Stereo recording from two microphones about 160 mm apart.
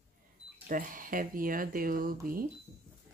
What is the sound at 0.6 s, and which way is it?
Speech, 60° right (ahead or behind).